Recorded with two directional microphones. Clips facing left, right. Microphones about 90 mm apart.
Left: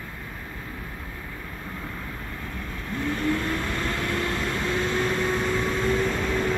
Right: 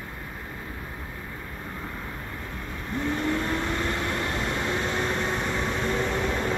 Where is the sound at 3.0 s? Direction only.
25° right (ahead or behind).